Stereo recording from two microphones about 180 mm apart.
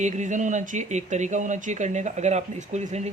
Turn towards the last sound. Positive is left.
turn(degrees=-40)  # may be behind; listen again after turning